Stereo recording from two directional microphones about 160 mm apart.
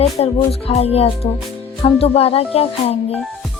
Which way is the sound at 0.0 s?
40° left (ahead or behind).